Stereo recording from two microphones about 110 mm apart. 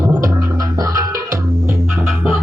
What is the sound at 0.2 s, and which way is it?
Music, 30° right (ahead or behind).